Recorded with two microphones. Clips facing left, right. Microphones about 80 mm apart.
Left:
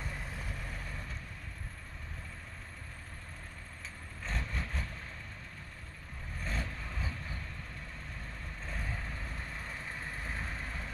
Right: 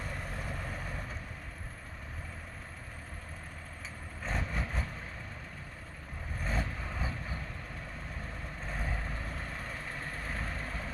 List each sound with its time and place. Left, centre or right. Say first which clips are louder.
0.5 s vehicle: right 4 dB; right
4.2 s vehicle: right 3 dB; centre
6.4 s vehicle: right 4 dB; centre
8.6 s vehicle: right 3 dB; centre